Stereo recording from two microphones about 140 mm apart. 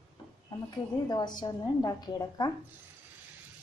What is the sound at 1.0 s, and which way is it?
A woman's voice, 30° left (ahead or behind).